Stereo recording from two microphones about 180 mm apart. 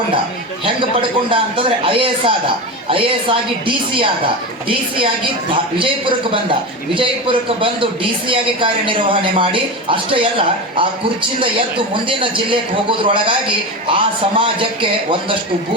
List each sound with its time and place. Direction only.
1.3 s a man's voice: 30° right (ahead or behind)
13.8 s a man's voice: 30° right (ahead or behind)